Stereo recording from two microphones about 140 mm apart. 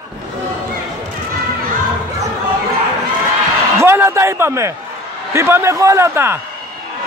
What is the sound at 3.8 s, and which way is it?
A man's voice, 20° right (ahead or behind).